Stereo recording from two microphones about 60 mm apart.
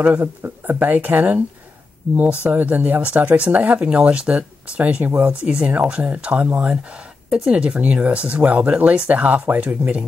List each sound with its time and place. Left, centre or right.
0.0 s speech: right